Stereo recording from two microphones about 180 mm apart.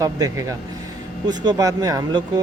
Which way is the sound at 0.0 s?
20° right (ahead or behind).